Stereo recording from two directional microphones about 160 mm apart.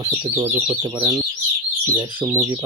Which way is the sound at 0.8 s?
25° right (ahead or behind).